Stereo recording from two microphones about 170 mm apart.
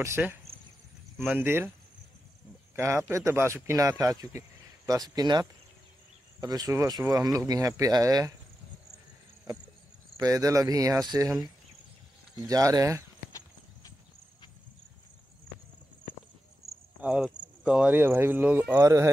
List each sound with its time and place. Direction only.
0.0 s speech: 15° right (ahead or behind)
2.7 s speech: 15° right (ahead or behind)
10.1 s speech: 20° right (ahead or behind)
12.4 s speech: 20° right (ahead or behind)
16.6 s cricket: 40° right (ahead or behind)
17.0 s speech: 5° right (ahead or behind)